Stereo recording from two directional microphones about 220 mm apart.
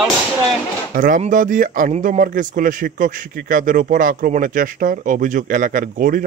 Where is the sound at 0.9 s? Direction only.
35° right (ahead or behind).